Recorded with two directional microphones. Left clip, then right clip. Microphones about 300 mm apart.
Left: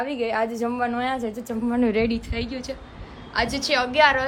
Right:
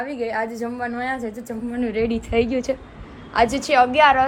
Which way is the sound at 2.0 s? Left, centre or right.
Centre.